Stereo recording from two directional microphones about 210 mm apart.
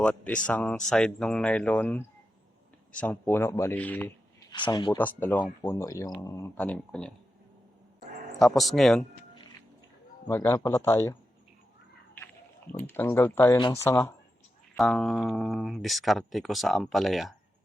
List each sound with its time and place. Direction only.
0.0 s speech: 5° left (ahead or behind)
4.5 s speech: 20° left (ahead or behind)
4.9 s speech: 10° left (ahead or behind)
8.4 s speech: centre (ahead or behind)
10.2 s speech: 15° left (ahead or behind)
12.7 s speech: 10° left (ahead or behind)
14.8 s speech: centre (ahead or behind)